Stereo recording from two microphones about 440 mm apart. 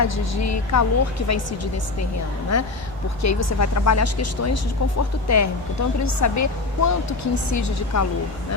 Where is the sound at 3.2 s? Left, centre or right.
Left.